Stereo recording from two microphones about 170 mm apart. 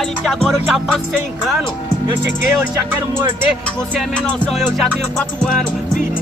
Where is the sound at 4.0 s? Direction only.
5° left (ahead or behind).